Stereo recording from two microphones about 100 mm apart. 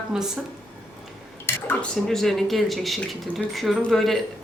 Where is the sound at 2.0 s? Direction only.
5° left (ahead or behind).